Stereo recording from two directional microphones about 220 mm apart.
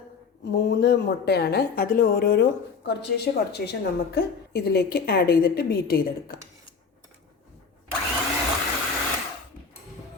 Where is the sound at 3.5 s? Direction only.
45° left (ahead or behind).